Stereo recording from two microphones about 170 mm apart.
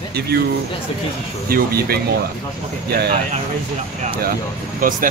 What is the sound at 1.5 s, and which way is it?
Speech, 60° right (ahead or behind).